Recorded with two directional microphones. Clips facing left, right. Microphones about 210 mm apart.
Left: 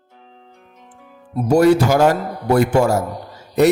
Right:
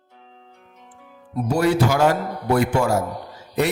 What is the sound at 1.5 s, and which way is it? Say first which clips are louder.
Speech: left 6 dB; 45° left (ahead or behind).